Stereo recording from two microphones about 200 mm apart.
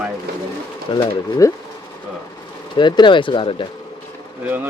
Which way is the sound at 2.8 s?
25° left (ahead or behind).